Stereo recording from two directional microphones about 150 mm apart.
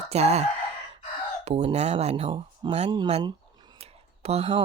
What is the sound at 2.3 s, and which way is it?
Speech, 35° right (ahead or behind).